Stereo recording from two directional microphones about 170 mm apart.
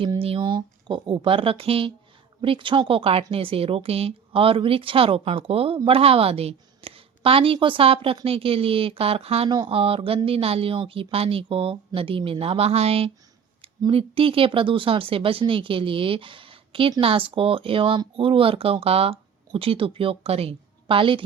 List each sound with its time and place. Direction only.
0.0 s a woman's voice: 30° right (ahead or behind)